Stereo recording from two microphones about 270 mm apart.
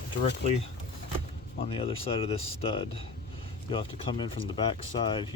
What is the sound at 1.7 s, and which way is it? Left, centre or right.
Speech, centre.